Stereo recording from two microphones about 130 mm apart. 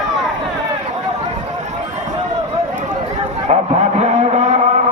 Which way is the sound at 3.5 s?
55° right (ahead or behind).